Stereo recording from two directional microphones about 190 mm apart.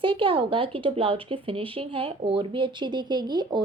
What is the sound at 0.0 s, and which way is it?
A woman's voice, 25° right (ahead or behind).